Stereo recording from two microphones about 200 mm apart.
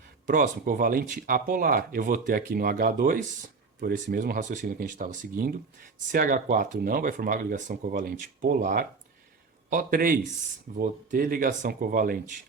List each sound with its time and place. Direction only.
0.3 s speech: 45° right (ahead or behind)